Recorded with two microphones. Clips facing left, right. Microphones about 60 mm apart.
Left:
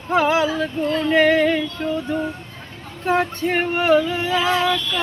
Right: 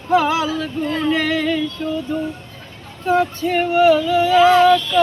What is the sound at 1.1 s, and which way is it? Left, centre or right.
Speech, left.